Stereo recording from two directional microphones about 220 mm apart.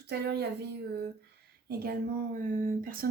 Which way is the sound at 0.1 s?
50° right (ahead or behind).